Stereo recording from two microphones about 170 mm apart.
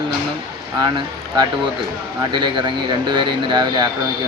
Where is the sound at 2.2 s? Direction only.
25° right (ahead or behind).